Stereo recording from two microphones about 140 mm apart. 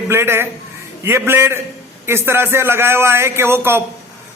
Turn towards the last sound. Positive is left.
turn(degrees=-15)  # may be behind; listen again after turning